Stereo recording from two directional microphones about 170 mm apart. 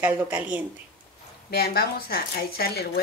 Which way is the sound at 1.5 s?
65° left (ahead or behind).